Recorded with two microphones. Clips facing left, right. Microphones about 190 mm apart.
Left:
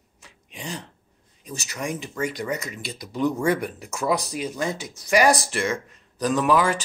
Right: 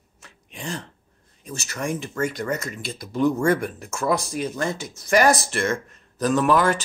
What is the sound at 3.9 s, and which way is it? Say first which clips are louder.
A man's voice: right 1 dB; 15° left (ahead or behind).